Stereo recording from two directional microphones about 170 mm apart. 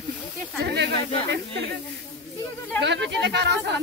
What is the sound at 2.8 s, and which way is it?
Speech, 90° right.